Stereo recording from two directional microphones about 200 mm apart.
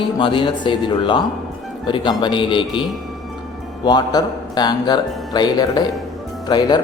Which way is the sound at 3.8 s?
20° left (ahead or behind).